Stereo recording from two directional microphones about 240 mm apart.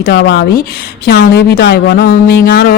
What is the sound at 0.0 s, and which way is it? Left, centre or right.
A woman's voice, left.